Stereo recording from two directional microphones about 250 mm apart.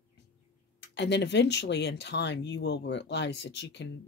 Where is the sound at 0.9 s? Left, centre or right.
Left.